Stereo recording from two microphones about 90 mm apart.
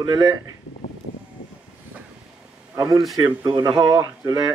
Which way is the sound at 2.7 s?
35° right (ahead or behind).